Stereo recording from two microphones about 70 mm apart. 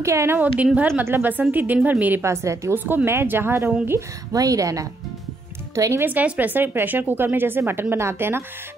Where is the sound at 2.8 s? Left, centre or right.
Right.